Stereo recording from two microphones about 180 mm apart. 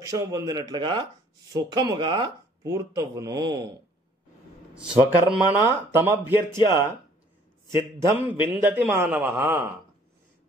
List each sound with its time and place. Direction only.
0.0 s speech: 20° right (ahead or behind)
4.7 s a man's voice: 10° right (ahead or behind)